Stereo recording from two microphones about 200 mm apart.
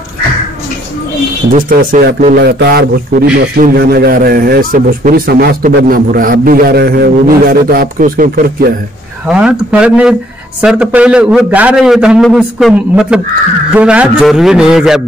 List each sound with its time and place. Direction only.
1.5 s a man's voice: 45° right (ahead or behind)
9.3 s a man's voice: 5° right (ahead or behind)